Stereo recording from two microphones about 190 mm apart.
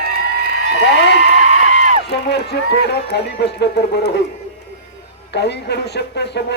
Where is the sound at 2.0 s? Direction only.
60° left (ahead or behind).